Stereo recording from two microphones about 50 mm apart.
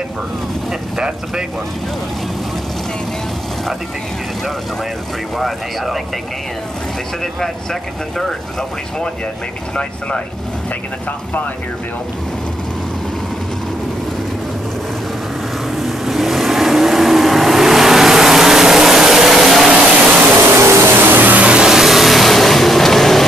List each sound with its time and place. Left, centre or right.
0.9 s speech: centre
15.7 s vehicle: centre
19.7 s a sound: centre
20.1 s a sound: right
20.5 s vehicle: right
21.5 s vehicle: centre